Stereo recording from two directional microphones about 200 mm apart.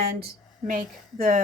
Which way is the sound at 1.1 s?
40° right (ahead or behind).